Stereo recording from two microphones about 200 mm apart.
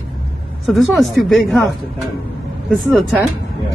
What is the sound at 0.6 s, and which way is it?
Speech, centre (ahead or behind).